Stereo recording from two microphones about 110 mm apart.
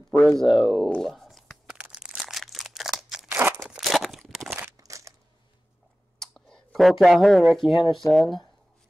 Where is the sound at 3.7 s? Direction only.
Centre (ahead or behind).